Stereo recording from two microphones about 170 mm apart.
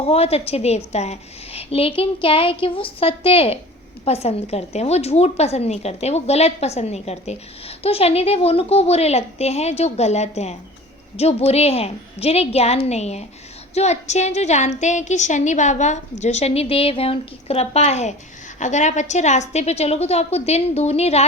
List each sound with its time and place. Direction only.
0.0 s a woman's voice: 35° left (ahead or behind)